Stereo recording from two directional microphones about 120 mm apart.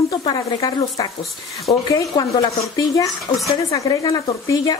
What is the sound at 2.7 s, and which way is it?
Speech, 25° left (ahead or behind).